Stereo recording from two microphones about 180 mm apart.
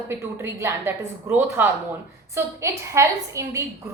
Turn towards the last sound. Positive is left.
turn(degrees=-15)  # may be behind; listen again after turning